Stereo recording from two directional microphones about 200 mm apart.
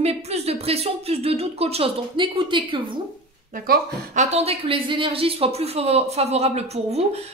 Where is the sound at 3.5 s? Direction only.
45° right (ahead or behind).